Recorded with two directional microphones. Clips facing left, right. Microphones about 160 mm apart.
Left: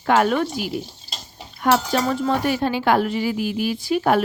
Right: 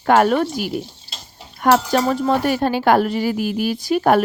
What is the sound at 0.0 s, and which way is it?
Speech, 45° right (ahead or behind).